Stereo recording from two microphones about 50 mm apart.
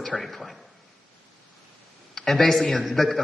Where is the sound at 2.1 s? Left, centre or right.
Centre.